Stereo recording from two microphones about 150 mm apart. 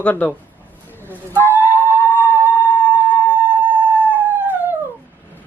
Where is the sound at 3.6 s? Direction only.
10° right (ahead or behind).